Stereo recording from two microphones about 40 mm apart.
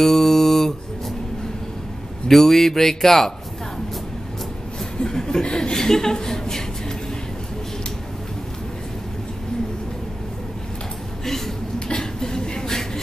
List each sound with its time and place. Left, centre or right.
0.0 s mantra: centre
2.2 s speech: centre
5.0 s speech: centre
11.2 s a sound: centre